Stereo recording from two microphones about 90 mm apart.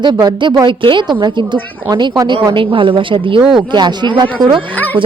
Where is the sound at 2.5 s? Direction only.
70° right (ahead or behind).